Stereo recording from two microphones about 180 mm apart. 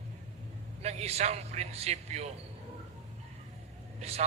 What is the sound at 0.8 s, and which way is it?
A man's voice, 35° right (ahead or behind).